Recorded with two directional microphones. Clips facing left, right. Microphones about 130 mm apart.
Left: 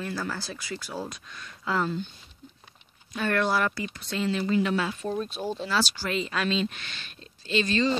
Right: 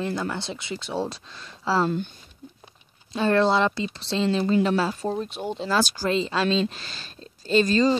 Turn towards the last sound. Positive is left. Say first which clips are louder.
# right 5 dB
turn(degrees=-40)  # may be behind; listen again after turning